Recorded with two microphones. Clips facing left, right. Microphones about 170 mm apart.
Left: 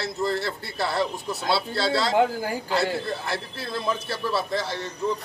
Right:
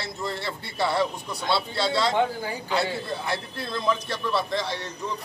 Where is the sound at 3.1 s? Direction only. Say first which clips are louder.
Even; centre (ahead or behind).